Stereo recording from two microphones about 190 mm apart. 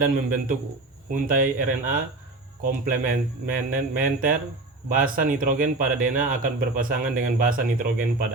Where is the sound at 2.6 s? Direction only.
45° right (ahead or behind).